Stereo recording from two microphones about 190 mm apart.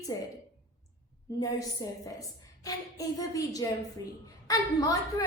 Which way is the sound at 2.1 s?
20° left (ahead or behind).